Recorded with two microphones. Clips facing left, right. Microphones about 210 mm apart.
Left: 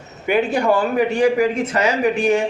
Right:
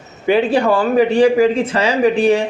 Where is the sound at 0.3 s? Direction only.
30° right (ahead or behind).